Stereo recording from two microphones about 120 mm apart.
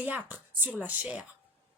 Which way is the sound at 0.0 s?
10° right (ahead or behind).